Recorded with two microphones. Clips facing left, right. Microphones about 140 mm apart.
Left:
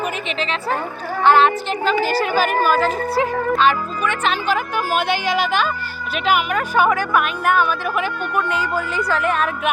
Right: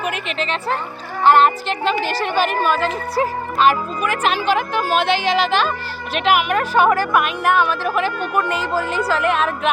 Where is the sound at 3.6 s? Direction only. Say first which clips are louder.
Right 1 dB; 35° right (ahead or behind).